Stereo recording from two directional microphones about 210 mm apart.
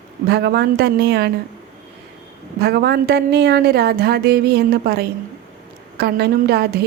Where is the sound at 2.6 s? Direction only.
50° right (ahead or behind).